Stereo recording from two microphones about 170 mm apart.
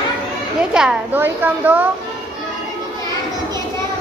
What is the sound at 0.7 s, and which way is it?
A woman's voice, 5° right (ahead or behind).